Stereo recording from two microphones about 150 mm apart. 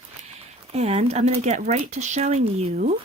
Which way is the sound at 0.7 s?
45° right (ahead or behind).